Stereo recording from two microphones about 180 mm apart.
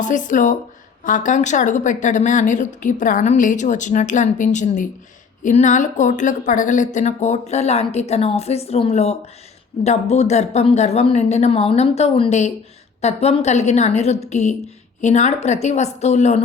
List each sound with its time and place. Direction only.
0.0 s a woman's voice: 45° left (ahead or behind)